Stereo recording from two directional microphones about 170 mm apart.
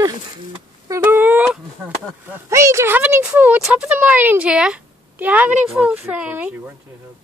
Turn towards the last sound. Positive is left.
turn(degrees=-10)  # may be behind; listen again after turning